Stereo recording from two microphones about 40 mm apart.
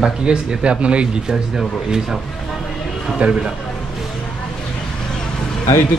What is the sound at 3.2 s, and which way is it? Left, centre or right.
Speech, right.